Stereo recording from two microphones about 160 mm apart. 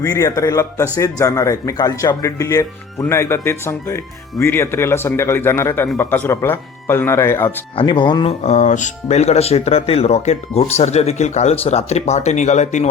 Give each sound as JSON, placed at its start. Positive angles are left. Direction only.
{"t": 0.0, "sound": "speech", "side_deg": 20}
{"t": 7.8, "sound": "speech", "side_deg": 30}
{"t": 8.3, "sound": "speech", "side_deg": 45}